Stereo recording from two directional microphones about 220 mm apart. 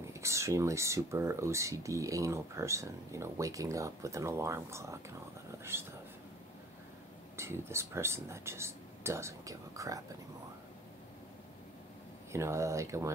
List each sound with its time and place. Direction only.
0.0 s speech: 15° right (ahead or behind)
7.3 s speech: 10° right (ahead or behind)
12.3 s speech: 10° right (ahead or behind)